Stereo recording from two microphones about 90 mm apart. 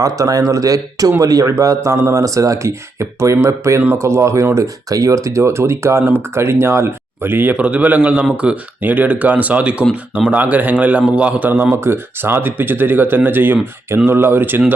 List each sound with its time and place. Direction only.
0.0 s a man's voice: 40° right (ahead or behind); by 14.6 s 25° right (ahead or behind)